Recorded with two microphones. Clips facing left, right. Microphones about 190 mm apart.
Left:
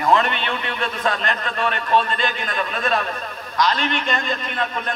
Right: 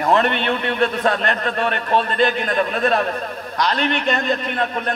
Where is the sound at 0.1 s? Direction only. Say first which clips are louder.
Right 2 dB; 55° right (ahead or behind).